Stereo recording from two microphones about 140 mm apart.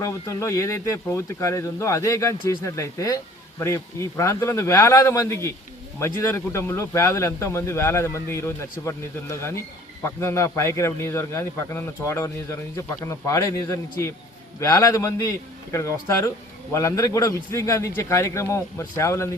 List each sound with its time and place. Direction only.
0.0 s speech: 20° left (ahead or behind)